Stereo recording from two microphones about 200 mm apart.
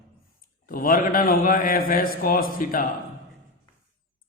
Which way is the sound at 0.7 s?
45° left (ahead or behind).